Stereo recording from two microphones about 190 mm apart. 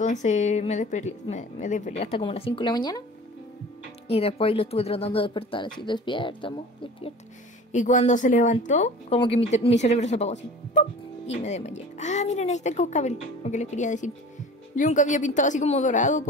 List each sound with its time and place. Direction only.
0.0 s a woman's voice: 40° left (ahead or behind); by 3.0 s 20° left (ahead or behind)
4.1 s speech: 30° left (ahead or behind)
7.7 s a woman's voice: 40° left (ahead or behind)